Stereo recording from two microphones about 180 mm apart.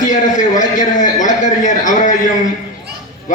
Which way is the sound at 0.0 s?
45° left (ahead or behind).